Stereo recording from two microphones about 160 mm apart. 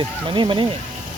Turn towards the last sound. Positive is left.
turn(degrees=-30)  # may be behind; listen again after turning